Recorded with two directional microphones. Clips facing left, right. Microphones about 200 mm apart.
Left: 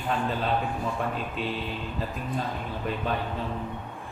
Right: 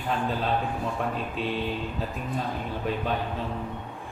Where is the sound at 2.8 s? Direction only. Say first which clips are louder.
Right 1 dB; centre (ahead or behind).